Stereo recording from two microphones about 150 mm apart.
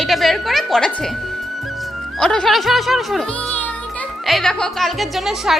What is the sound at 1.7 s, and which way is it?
Music, centre (ahead or behind).